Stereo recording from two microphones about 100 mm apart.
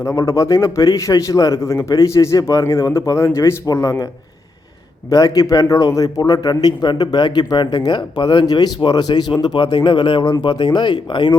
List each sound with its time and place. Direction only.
0.0 s a man's voice: 30° left (ahead or behind)
9.7 s a man's voice: 55° left (ahead or behind)